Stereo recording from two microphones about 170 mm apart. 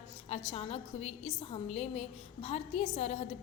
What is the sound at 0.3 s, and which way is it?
A woman's voice, 35° left (ahead or behind).